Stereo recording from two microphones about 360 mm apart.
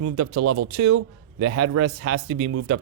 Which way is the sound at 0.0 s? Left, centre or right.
Right.